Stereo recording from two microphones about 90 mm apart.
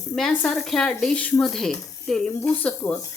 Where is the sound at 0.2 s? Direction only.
5° left (ahead or behind).